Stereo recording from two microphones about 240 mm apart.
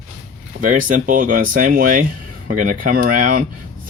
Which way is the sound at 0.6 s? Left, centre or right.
Right.